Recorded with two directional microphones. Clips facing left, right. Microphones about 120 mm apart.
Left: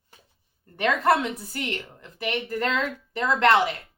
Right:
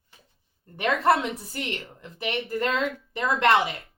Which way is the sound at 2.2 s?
25° right (ahead or behind).